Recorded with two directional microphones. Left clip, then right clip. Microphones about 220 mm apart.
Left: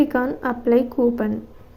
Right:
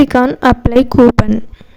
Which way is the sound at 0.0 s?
50° right (ahead or behind).